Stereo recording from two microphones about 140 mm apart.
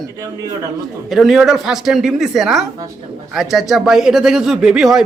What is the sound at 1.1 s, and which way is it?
A man's voice, centre (ahead or behind).